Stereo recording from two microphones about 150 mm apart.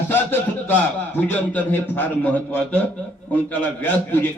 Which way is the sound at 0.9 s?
15° left (ahead or behind).